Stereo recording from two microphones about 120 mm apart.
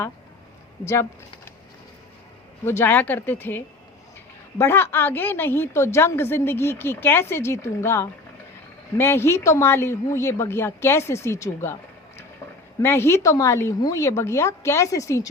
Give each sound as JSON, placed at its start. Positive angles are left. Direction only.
{"t": 2.6, "sound": "a woman's voice", "side_deg": 20}